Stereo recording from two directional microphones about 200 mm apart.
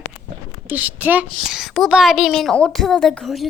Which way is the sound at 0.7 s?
5° right (ahead or behind).